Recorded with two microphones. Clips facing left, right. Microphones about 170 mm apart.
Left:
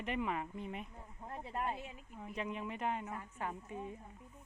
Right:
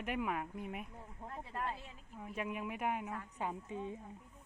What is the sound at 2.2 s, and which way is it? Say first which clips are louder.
A man's voice: right 1 dB; 5° right (ahead or behind).